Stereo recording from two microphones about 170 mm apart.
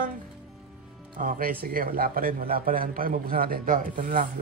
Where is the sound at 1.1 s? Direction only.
55° right (ahead or behind).